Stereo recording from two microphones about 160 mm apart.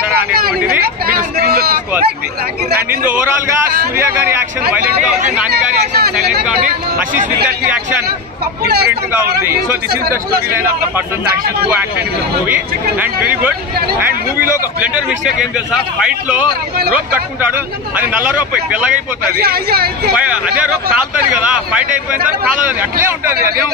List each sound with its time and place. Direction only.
0.3 s a sound: 70° right (ahead or behind)
1.0 s speech: 70° right (ahead or behind)
5.5 s speech: 75° right (ahead or behind)
8.6 s speech: 90° right
9.2 s speech: 15° right (ahead or behind)
12.4 s speech: 10° right (ahead or behind)
16.9 s speech: 10° right (ahead or behind)
19.4 s speech: 75° right (ahead or behind)
20.2 s speech: 10° right (ahead or behind)